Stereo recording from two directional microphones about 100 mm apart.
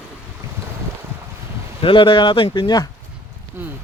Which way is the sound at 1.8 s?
55° left (ahead or behind).